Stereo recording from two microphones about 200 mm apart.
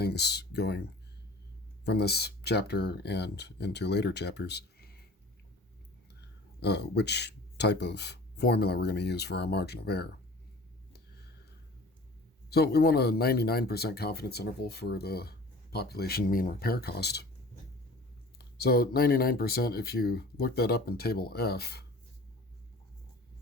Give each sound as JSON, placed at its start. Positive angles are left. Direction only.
{"t": 0.0, "sound": "speech", "side_deg": 55}
{"t": 1.8, "sound": "speech", "side_deg": 55}
{"t": 6.6, "sound": "speech", "side_deg": 55}
{"t": 12.5, "sound": "speech", "side_deg": 55}
{"t": 18.3, "sound": "speech", "side_deg": 50}